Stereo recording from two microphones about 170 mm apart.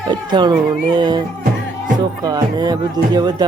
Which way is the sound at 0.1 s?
25° right (ahead or behind).